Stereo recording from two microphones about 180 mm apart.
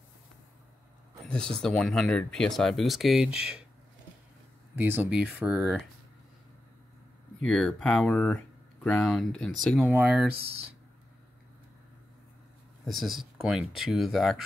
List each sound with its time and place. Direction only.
1.3 s speech: 5° left (ahead or behind)
4.7 s speech: 10° right (ahead or behind)
7.4 s speech: 5° left (ahead or behind)
12.8 s speech: centre (ahead or behind)